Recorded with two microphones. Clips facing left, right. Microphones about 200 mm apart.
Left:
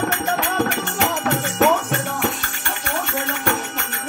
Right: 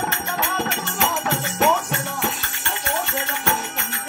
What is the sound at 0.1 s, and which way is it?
Music, 55° left (ahead or behind).